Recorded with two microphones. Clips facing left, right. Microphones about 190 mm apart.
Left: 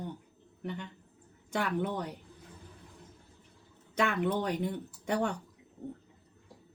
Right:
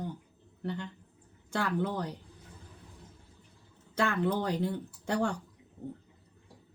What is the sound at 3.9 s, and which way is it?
Speech, 20° left (ahead or behind).